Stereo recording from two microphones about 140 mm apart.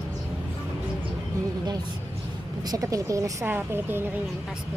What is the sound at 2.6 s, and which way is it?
A woman's voice, 25° right (ahead or behind).